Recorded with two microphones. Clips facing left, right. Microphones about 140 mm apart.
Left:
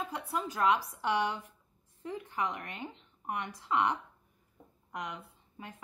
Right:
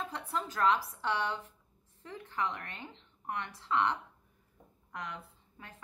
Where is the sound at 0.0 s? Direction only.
10° left (ahead or behind).